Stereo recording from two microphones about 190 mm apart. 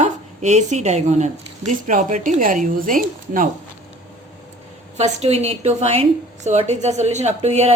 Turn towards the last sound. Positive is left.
turn(degrees=-35)  # may be behind; listen again after turning